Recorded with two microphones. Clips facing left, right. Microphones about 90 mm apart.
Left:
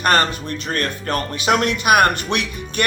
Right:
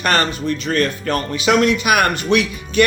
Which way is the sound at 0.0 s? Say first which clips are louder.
Even; 45° left (ahead or behind).